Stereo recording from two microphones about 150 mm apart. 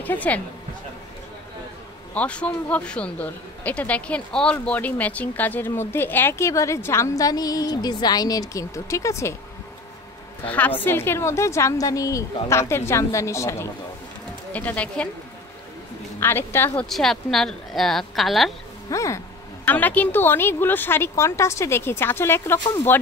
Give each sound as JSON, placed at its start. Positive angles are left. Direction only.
{"t": 0.0, "sound": "a woman's voice", "side_deg": 10}
{"t": 2.1, "sound": "speech", "side_deg": 10}
{"t": 10.5, "sound": "a woman's voice", "side_deg": 10}
{"t": 16.2, "sound": "speech", "side_deg": 15}
{"t": 16.9, "sound": "speech", "side_deg": 0}
{"t": 18.9, "sound": "speech", "side_deg": 20}